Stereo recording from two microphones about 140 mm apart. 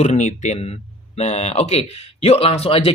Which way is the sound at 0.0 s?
60° left (ahead or behind).